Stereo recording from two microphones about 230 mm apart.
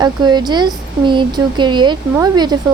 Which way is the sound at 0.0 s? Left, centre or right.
Centre.